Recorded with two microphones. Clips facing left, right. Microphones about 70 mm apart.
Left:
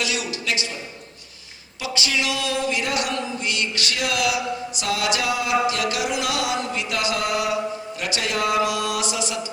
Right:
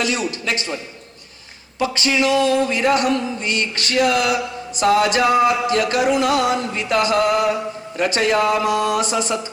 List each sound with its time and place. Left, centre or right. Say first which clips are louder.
0.0 s music: right 5 dB; right
1.8 s music: right 7 dB; right